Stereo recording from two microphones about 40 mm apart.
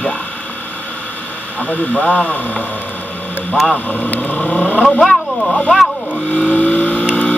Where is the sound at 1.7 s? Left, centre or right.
Left.